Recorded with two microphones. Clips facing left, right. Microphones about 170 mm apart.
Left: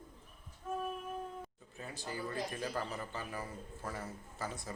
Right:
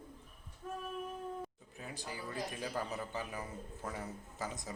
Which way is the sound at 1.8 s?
15° right (ahead or behind).